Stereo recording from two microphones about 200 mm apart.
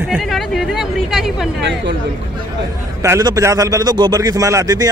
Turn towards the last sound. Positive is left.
turn(degrees=-15)  # may be behind; listen again after turning